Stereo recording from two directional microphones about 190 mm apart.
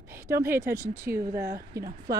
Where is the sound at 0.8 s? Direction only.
55° right (ahead or behind).